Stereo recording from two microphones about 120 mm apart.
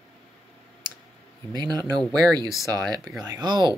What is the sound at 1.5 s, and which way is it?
Speech, 35° right (ahead or behind).